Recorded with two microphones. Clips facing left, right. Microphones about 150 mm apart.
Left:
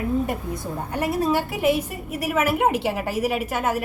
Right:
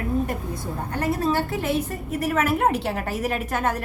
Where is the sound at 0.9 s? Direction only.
10° left (ahead or behind).